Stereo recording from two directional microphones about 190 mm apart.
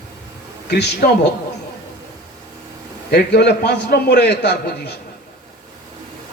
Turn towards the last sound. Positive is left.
turn(degrees=60)  # may be behind; listen again after turning